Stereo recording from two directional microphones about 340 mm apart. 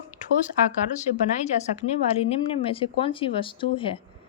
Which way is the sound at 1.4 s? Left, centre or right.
Centre.